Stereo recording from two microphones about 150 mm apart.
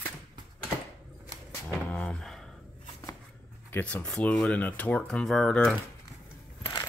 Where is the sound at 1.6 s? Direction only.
10° left (ahead or behind).